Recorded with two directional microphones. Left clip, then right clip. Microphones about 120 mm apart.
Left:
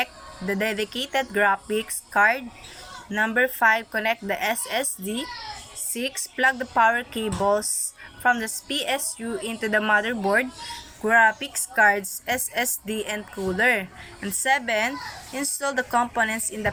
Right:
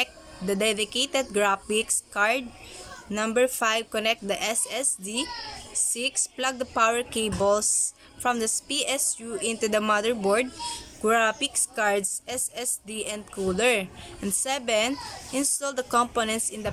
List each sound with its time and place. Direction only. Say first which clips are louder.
0.0 s speech: left 1 dB; 25° right (ahead or behind)